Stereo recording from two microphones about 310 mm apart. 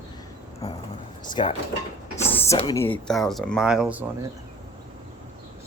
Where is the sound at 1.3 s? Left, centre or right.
Centre.